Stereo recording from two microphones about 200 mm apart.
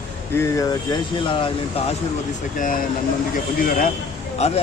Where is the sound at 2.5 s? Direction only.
40° left (ahead or behind).